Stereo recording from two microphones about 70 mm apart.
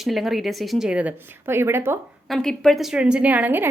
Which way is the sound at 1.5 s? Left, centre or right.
Right.